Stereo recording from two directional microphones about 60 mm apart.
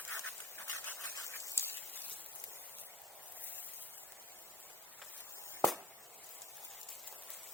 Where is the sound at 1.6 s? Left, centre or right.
Left.